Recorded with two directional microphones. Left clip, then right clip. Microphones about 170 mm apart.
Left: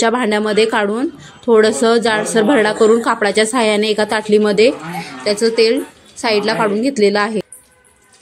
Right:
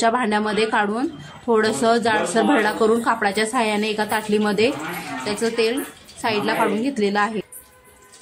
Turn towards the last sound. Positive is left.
turn(degrees=25)  # may be behind; listen again after turning